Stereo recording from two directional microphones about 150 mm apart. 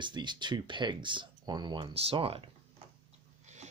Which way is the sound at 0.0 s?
30° right (ahead or behind).